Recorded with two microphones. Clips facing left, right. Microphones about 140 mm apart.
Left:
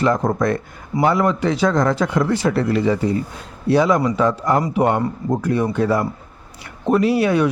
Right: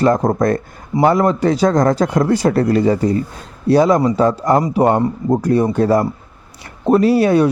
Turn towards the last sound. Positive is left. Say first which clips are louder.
# right 4 dB
turn(degrees=-40)  # may be behind; listen again after turning